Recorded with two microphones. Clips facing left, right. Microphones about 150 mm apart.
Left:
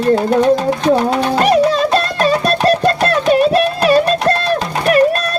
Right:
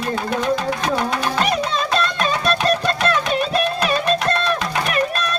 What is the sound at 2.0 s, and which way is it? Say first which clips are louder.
Music: left 6 dB; 35° left (ahead or behind).